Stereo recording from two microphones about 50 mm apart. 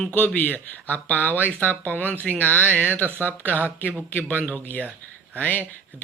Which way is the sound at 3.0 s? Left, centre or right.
Right.